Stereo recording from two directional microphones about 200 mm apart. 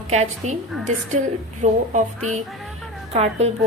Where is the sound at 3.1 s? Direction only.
35° right (ahead or behind).